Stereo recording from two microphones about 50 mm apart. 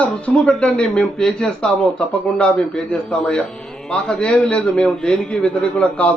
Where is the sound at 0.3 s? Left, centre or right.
Centre.